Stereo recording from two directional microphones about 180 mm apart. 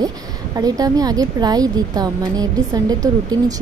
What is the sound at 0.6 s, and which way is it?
A woman's voice, 20° right (ahead or behind).